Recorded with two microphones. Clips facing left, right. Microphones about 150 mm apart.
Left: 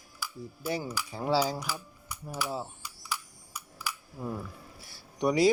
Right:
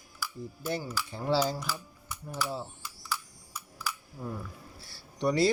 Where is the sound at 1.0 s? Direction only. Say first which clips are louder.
Even; 10° left (ahead or behind).